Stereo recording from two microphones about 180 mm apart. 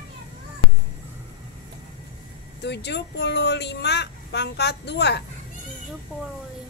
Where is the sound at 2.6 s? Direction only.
70° left (ahead or behind).